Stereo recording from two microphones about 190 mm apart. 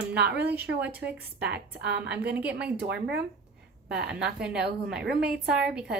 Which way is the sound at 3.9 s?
5° right (ahead or behind).